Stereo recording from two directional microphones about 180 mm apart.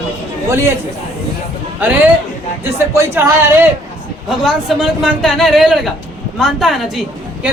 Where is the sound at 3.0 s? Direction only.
15° right (ahead or behind).